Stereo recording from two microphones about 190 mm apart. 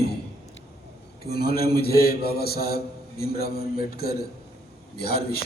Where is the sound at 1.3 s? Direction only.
55° left (ahead or behind).